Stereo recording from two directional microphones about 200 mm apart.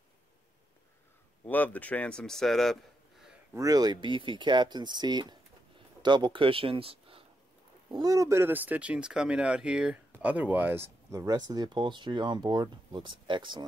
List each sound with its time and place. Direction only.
1.4 s speech: 10° left (ahead or behind)
3.5 s speech: 20° right (ahead or behind)